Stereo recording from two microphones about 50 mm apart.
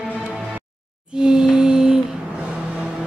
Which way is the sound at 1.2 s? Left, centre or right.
Centre.